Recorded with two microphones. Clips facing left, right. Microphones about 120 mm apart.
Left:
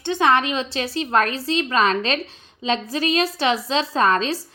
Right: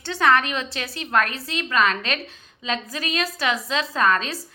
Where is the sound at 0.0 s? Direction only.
20° left (ahead or behind).